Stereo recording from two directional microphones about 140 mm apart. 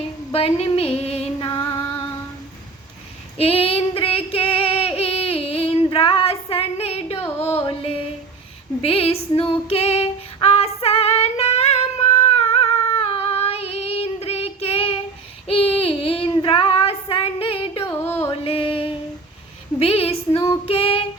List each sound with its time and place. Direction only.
0.3 s a sound: 45° left (ahead or behind)
3.3 s female singing: 45° left (ahead or behind)
7.3 s music: 45° left (ahead or behind)
8.8 s female singing: 45° left (ahead or behind)
15.4 s child singing: 45° left (ahead or behind)
17.8 s music: 15° left (ahead or behind)
18.3 s music: 45° left (ahead or behind)
19.8 s child singing: 45° left (ahead or behind)